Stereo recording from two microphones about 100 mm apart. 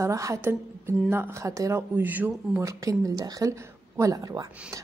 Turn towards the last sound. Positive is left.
turn(degrees=-40)  # may be behind; listen again after turning